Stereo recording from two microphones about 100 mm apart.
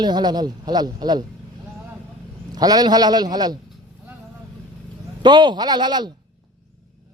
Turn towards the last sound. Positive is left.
turn(degrees=-45)  # may be behind; listen again after turning